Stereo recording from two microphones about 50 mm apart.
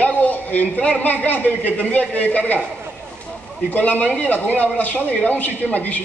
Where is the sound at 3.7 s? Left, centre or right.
Left.